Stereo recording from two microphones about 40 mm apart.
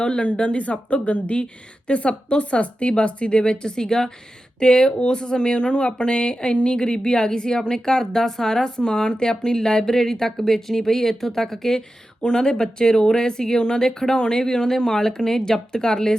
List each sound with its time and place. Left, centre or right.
0.0 s speech: left